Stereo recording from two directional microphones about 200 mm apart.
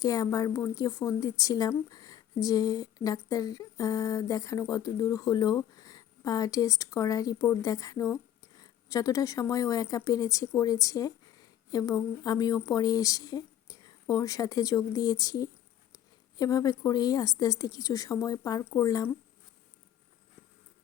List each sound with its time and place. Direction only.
0.0 s a woman's voice: 20° left (ahead or behind)